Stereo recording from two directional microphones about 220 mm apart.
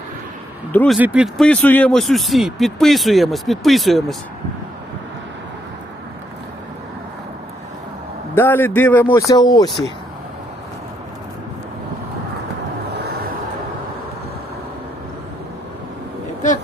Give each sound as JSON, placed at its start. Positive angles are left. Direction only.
{"t": 0.7, "sound": "speech", "side_deg": 10}
{"t": 0.9, "sound": "speech", "side_deg": -5}
{"t": 8.4, "sound": "a man's voice", "side_deg": 10}